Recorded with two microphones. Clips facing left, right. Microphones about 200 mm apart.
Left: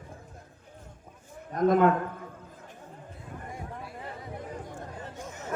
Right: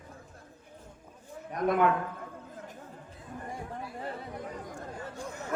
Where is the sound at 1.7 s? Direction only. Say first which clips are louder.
Left 3 dB; 45° left (ahead or behind).